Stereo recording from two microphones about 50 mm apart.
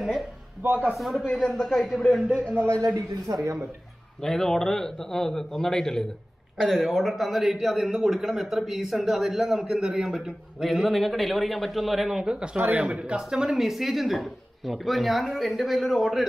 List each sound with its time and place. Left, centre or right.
0.0 s speech: centre
0.6 s a man's voice: right
0.9 s a man's voice: centre
2.6 s a man's voice: right
3.3 s speech: right
4.2 s a man's voice: centre
12.2 s a man's voice: centre
13.2 s a man's voice: centre